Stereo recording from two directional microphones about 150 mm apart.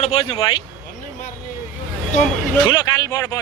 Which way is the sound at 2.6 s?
25° left (ahead or behind).